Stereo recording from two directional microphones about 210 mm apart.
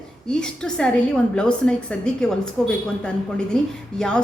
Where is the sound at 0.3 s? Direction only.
5° left (ahead or behind).